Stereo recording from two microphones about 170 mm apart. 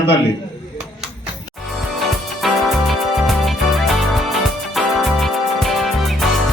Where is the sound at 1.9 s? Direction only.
Centre (ahead or behind).